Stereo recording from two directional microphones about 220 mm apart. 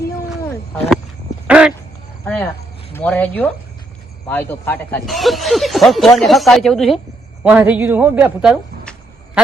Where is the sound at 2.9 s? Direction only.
5° left (ahead or behind).